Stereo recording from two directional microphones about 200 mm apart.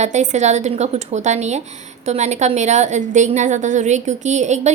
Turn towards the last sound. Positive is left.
turn(degrees=-35)  # may be behind; listen again after turning